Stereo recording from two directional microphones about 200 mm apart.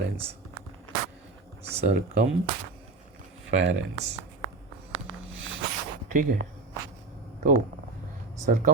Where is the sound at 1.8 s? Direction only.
50° right (ahead or behind).